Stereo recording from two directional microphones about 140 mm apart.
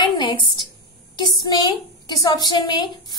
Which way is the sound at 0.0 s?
35° left (ahead or behind).